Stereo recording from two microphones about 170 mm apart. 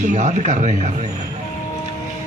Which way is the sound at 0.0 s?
45° right (ahead or behind).